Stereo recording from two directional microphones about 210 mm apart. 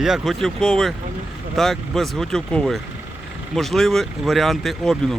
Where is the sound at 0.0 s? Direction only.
Centre (ahead or behind).